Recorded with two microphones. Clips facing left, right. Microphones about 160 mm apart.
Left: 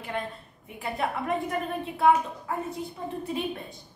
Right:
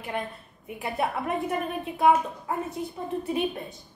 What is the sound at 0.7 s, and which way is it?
A woman's voice, 20° right (ahead or behind).